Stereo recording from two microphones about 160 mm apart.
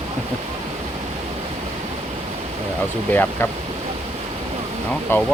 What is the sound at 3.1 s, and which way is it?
Speech, 10° left (ahead or behind).